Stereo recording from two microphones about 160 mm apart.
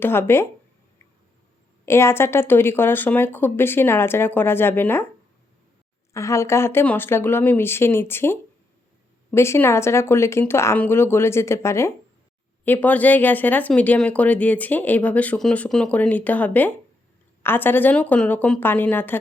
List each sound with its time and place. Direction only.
0.0 s speech: 15° left (ahead or behind)
1.8 s speech: 15° left (ahead or behind)
6.1 s speech: 20° left (ahead or behind)